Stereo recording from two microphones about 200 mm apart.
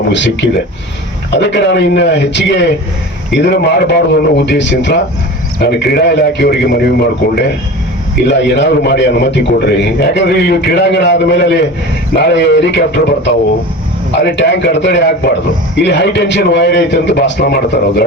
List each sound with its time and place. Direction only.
0.1 s a man's voice: 60° left (ahead or behind)
14.2 s a man's voice: 60° left (ahead or behind)